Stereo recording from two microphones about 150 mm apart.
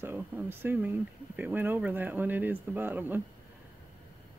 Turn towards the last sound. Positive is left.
turn(degrees=-15)  # may be behind; listen again after turning